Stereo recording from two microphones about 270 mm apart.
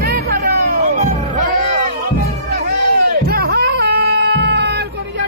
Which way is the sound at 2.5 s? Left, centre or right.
Right.